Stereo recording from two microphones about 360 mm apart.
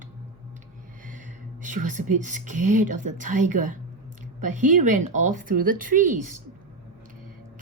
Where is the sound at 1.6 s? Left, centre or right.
Right.